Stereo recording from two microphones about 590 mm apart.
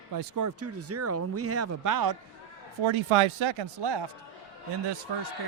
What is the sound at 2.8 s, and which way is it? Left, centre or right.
Speech, right.